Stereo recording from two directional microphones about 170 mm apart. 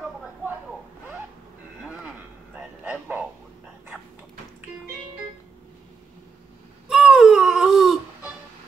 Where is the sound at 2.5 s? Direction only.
10° right (ahead or behind).